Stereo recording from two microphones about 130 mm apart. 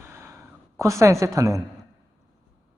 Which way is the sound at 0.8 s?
25° right (ahead or behind).